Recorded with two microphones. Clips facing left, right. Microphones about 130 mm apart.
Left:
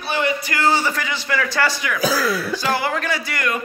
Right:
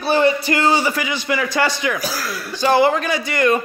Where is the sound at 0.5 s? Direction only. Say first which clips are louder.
Right 2 dB; 15° right (ahead or behind).